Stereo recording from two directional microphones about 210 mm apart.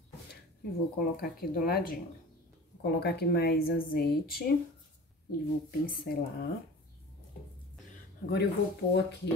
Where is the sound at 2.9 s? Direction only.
50° left (ahead or behind).